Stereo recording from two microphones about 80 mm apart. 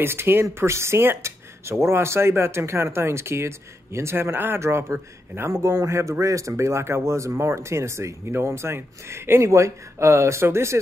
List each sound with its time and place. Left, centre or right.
0.0 s speech: right